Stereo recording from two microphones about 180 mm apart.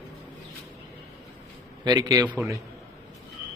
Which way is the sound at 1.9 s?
20° right (ahead or behind).